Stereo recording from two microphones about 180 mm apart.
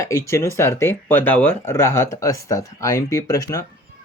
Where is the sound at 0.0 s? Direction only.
15° left (ahead or behind).